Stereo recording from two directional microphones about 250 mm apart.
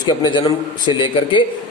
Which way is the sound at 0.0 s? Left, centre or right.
Centre.